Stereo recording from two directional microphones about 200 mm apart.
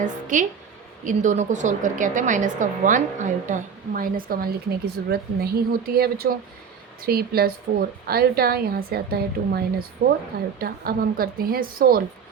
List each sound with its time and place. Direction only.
0.0 s a woman's voice: 40° right (ahead or behind)